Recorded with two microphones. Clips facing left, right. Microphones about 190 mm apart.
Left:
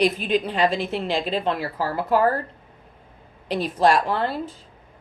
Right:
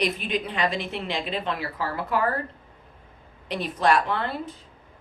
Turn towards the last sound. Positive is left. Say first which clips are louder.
# left 3 dB
turn(degrees=35)  # may be behind; listen again after turning